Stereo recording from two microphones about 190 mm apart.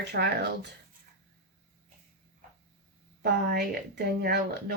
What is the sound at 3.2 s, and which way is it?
A woman's voice, 55° right (ahead or behind).